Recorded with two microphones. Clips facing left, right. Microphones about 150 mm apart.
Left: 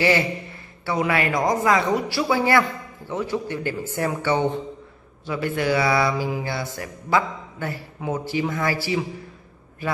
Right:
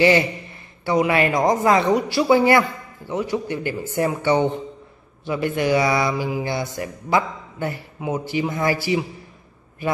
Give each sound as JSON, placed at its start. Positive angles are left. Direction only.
{"t": 0.8, "sound": "a man's voice", "side_deg": -20}